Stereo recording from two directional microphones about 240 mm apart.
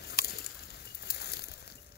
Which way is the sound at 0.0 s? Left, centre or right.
Left.